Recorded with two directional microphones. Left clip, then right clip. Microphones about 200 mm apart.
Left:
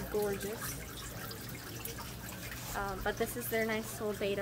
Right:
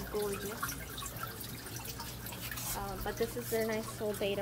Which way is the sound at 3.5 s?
15° left (ahead or behind).